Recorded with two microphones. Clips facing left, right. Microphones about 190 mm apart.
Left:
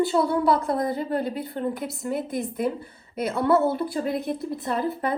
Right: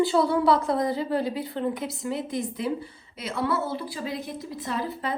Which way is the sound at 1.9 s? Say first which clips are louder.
Left 2 dB; 55° left (ahead or behind).